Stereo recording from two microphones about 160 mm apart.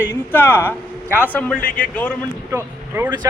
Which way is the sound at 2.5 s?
15° right (ahead or behind).